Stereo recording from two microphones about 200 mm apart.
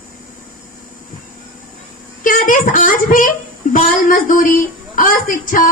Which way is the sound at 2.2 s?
40° left (ahead or behind).